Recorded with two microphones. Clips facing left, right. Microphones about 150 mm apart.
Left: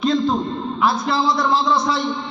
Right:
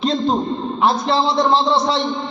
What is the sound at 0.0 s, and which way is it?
A man's voice, 35° right (ahead or behind).